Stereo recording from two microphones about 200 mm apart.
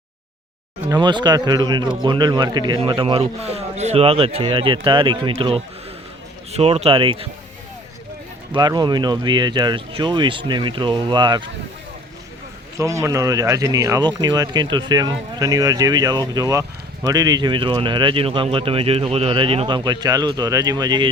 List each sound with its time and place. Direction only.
0.9 s speech: 20° right (ahead or behind)
8.5 s speech: 20° right (ahead or behind)
12.8 s speech: 15° right (ahead or behind)